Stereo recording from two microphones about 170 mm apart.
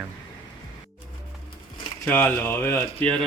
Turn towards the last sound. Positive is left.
turn(degrees=10)  # may be behind; listen again after turning